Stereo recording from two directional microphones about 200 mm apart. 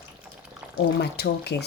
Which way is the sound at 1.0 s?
55° left (ahead or behind).